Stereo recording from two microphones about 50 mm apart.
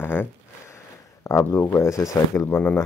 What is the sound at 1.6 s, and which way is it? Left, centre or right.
Speech, left.